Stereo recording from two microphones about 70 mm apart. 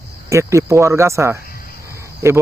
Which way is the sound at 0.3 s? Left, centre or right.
Right.